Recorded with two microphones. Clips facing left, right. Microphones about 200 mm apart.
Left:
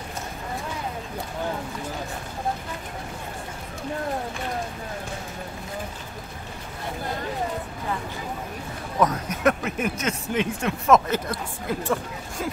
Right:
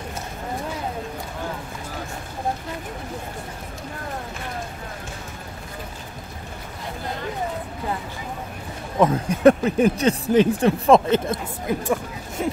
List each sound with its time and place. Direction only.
9.0 s speech: 30° right (ahead or behind)
11.8 s speech: 15° right (ahead or behind)